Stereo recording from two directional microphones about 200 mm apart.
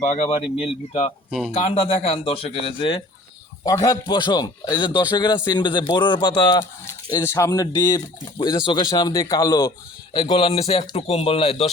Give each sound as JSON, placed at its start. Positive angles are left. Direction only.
{"t": 0.0, "sound": "speech", "side_deg": 35}